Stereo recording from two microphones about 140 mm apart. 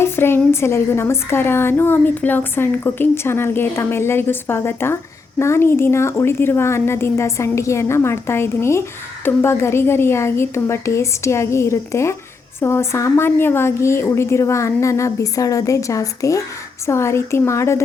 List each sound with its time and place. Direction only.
0.0 s a woman's voice: 15° left (ahead or behind)